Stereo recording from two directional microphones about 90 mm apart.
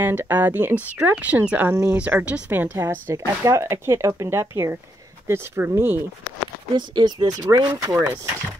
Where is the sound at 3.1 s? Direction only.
35° right (ahead or behind).